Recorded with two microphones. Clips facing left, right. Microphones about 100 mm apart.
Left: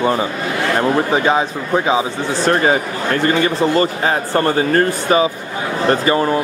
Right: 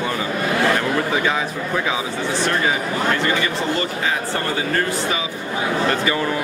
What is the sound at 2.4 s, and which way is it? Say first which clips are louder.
A man's voice: left 8 dB; 40° left (ahead or behind).